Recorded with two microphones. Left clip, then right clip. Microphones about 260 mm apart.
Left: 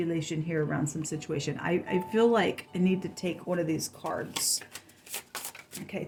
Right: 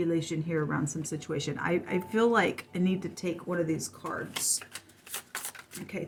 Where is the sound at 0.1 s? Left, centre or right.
Left.